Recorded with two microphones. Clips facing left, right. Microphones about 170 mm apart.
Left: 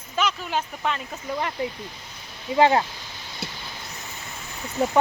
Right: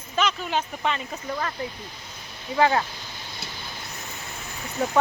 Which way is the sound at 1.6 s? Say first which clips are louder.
Left 4 dB; 20° left (ahead or behind).